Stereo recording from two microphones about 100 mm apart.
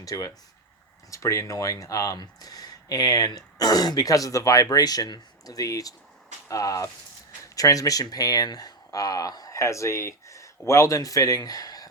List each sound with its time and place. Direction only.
0.0 s speech: 35° left (ahead or behind)